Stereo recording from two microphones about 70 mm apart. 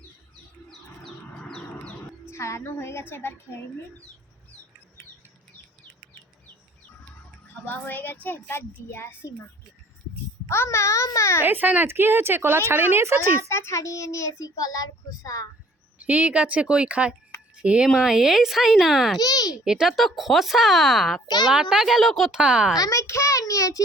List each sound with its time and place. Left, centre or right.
0.7 s bird: centre
2.3 s a woman's voice: left
7.4 s music: left
7.9 s a woman's voice: left
10.5 s a child's voice: left
11.4 s a woman's voice: right
13.5 s a child's voice: left
16.0 s a woman's voice: right; by 19.2 s centre
19.2 s a child's voice: left
19.6 s speech: centre
21.2 s a child's voice: left
21.5 s speech: centre
22.3 s speech: centre
22.7 s a child's voice: left